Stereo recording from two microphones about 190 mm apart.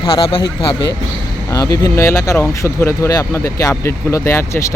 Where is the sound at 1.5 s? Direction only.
15° left (ahead or behind).